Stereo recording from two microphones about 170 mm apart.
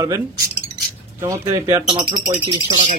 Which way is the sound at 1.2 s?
15° right (ahead or behind).